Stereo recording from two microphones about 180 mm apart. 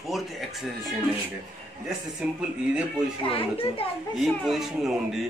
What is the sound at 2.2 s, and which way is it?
Speech, 5° right (ahead or behind).